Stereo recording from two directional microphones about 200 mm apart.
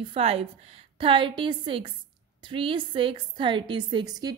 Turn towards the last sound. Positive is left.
turn(degrees=-20)  # may be behind; listen again after turning